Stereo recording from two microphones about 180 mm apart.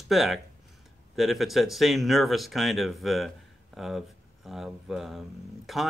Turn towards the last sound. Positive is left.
turn(degrees=0)  # may be behind; listen again after turning